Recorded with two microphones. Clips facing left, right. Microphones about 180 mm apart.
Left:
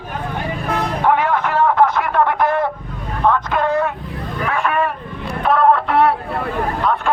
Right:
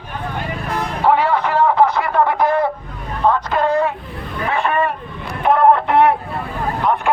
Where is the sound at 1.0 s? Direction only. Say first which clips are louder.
Right 2 dB; 10° right (ahead or behind).